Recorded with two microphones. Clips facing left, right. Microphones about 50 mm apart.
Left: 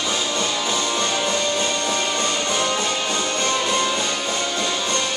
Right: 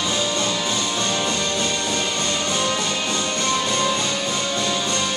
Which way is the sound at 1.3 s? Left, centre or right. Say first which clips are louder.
Left 1 dB; centre.